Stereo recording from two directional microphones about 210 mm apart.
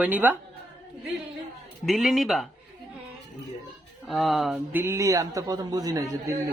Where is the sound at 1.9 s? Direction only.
Centre (ahead or behind).